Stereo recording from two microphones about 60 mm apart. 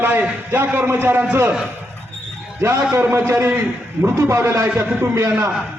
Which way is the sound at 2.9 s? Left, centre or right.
Right.